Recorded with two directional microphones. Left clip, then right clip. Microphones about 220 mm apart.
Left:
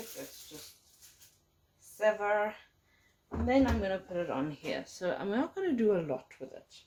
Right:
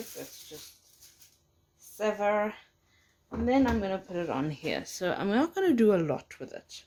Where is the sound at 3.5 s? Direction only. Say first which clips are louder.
Right 2 dB; 40° right (ahead or behind).